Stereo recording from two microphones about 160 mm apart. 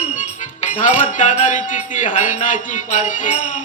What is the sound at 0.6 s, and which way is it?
Speech, 50° left (ahead or behind).